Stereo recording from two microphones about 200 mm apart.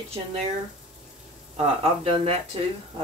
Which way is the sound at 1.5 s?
30° right (ahead or behind).